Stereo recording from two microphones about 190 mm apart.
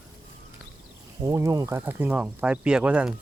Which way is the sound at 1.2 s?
15° right (ahead or behind).